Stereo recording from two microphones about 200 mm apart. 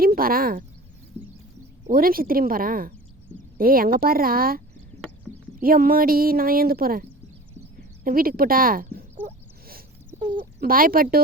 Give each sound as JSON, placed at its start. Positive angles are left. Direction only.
{"t": 0.0, "sound": "speech", "side_deg": -45}
{"t": 1.2, "sound": "a sound", "side_deg": -30}
{"t": 1.9, "sound": "speech", "side_deg": -45}
{"t": 8.0, "sound": "speech", "side_deg": -45}
{"t": 10.6, "sound": "speech", "side_deg": -45}